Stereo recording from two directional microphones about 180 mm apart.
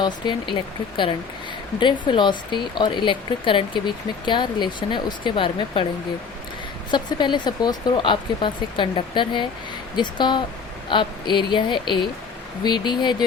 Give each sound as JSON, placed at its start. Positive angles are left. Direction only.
{"t": 0.0, "sound": "speech", "side_deg": 25}
{"t": 6.9, "sound": "speech", "side_deg": 25}